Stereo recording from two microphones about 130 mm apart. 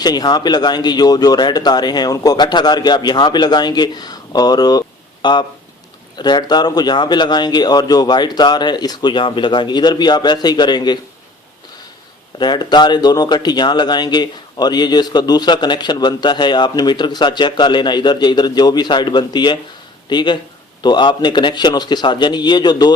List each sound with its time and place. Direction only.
0.0 s speech: 30° left (ahead or behind)
12.4 s speech: 35° left (ahead or behind)